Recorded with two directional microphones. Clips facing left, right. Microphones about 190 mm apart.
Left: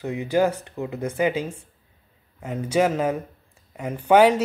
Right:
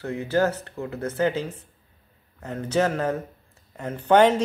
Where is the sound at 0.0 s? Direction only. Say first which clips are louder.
Left 2 dB; 15° left (ahead or behind).